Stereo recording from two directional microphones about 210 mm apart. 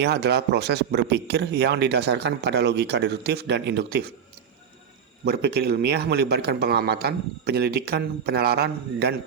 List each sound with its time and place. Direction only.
0.0 s speech: 50° right (ahead or behind)
5.2 s speech: 50° right (ahead or behind)